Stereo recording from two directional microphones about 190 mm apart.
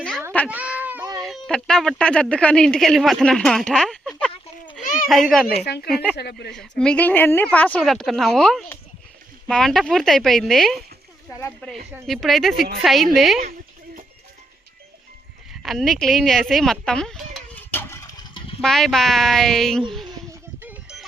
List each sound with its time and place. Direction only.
0.4 s cat: 5° right (ahead or behind)
1.2 s speech: 5° left (ahead or behind)
4.8 s a sound: 45° left (ahead or behind)
5.0 s speech: centre (ahead or behind)
5.6 s speech: 60° left (ahead or behind)
5.9 s speech: centre (ahead or behind)
6.1 s speech: 60° left (ahead or behind)
6.5 s speech: 5° left (ahead or behind)
11.3 s speech: 15° left (ahead or behind)
12.0 s speech: centre (ahead or behind)
15.6 s a sound: centre (ahead or behind); by 18.5 s 25° left (ahead or behind)
18.6 s speech: centre (ahead or behind)
20.6 s a sound: 5° right (ahead or behind)